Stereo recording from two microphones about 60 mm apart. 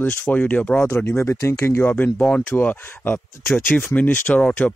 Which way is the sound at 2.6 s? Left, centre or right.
Left.